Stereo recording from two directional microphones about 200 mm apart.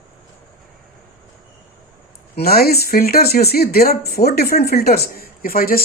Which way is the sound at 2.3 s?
50° left (ahead or behind).